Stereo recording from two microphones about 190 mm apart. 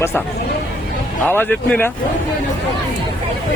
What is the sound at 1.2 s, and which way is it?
Speech, 10° left (ahead or behind).